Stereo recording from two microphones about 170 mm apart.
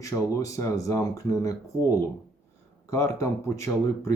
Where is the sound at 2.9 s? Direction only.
20° left (ahead or behind).